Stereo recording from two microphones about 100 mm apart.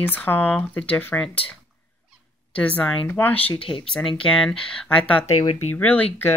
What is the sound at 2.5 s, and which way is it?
Speech, 15° left (ahead or behind).